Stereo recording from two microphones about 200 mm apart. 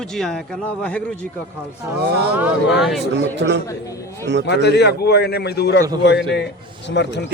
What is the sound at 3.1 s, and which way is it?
Speech, 60° right (ahead or behind).